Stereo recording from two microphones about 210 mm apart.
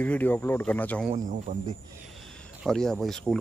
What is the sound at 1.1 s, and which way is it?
Speech, 35° right (ahead or behind).